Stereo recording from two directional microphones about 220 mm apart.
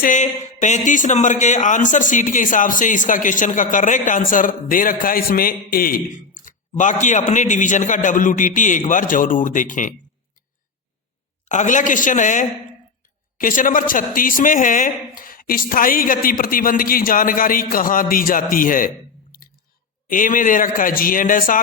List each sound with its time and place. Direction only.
0.0 s speech: 35° left (ahead or behind)
11.4 s speech: 35° left (ahead or behind)
20.1 s speech: 35° left (ahead or behind)